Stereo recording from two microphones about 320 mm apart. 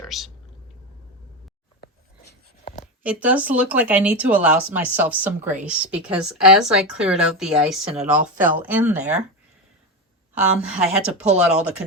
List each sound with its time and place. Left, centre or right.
0.0 s a sound: centre
3.0 s a woman's voice: centre
10.3 s a woman's voice: centre